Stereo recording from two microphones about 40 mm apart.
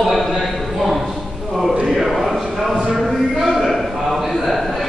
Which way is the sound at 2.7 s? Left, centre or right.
Centre.